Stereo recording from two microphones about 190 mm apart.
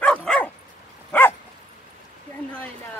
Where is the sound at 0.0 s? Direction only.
5° left (ahead or behind).